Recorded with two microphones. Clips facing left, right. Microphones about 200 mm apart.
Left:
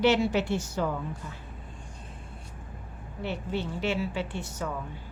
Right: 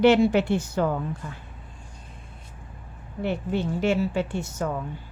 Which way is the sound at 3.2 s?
50° right (ahead or behind).